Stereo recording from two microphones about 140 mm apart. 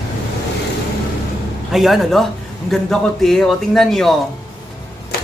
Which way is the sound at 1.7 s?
Centre (ahead or behind).